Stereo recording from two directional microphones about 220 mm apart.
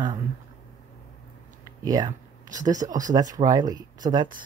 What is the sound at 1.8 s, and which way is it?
Speech, 15° right (ahead or behind).